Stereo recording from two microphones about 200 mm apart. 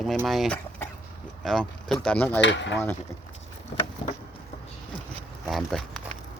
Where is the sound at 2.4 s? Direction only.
65° left (ahead or behind).